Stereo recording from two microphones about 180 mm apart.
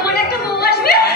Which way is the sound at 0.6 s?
60° left (ahead or behind).